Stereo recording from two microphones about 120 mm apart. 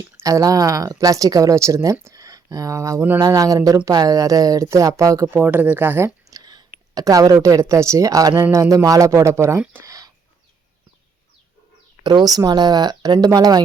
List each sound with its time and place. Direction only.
0.2 s speech: 30° right (ahead or behind)
5.3 s speech: 15° right (ahead or behind)
6.3 s speech: 35° right (ahead or behind)
9.8 s a sound: 30° right (ahead or behind)
12.0 s speech: 35° right (ahead or behind)